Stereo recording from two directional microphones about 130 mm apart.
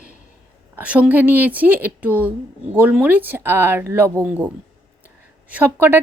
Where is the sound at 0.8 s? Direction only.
10° right (ahead or behind).